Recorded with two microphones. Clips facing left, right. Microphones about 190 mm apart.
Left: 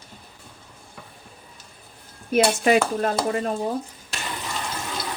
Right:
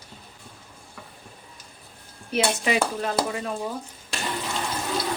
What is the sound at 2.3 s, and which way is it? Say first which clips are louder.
Speech: left 6 dB; 50° left (ahead or behind).